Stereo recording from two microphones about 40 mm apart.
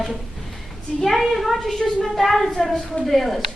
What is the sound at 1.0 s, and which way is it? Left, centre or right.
A woman's voice, centre.